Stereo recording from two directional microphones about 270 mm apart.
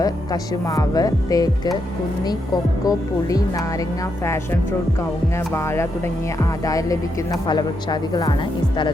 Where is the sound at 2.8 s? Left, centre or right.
Centre.